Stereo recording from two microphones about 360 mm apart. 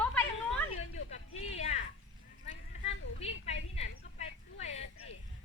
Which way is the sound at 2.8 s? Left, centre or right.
Centre.